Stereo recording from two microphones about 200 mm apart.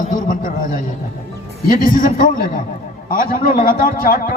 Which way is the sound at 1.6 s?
45° left (ahead or behind).